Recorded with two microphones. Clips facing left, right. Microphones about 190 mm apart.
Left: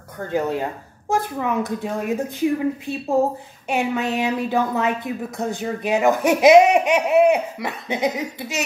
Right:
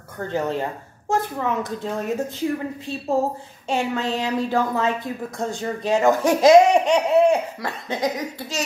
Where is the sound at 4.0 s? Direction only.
15° left (ahead or behind).